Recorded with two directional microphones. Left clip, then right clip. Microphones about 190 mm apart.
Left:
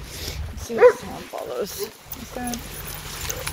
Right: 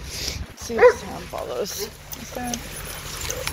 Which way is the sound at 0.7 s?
45° left (ahead or behind).